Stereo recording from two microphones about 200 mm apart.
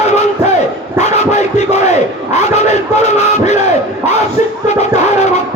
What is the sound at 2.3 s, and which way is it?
Battle cry, 35° left (ahead or behind).